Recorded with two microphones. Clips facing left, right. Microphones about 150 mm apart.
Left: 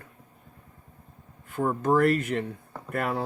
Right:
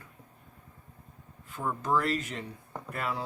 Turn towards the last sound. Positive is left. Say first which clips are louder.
# left 5 dB
turn(degrees=55)  # may be behind; listen again after turning